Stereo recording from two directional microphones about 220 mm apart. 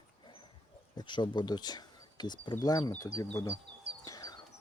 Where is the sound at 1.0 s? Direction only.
20° left (ahead or behind).